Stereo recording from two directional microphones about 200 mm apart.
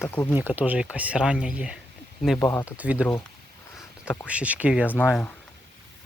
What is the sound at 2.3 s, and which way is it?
Speech, 15° left (ahead or behind).